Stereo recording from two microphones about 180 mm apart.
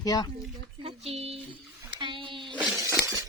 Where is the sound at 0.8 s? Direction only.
35° right (ahead or behind); by 3.2 s 15° right (ahead or behind).